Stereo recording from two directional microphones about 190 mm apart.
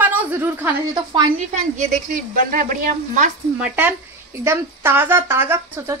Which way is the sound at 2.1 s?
45° right (ahead or behind).